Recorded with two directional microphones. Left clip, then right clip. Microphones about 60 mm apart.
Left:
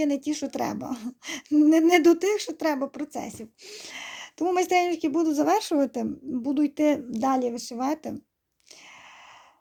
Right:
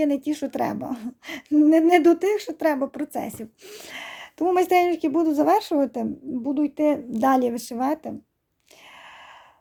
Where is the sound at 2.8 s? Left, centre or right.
Right.